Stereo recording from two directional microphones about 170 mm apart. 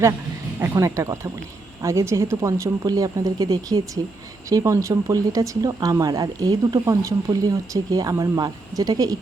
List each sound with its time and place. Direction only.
0.6 s speech: 15° right (ahead or behind)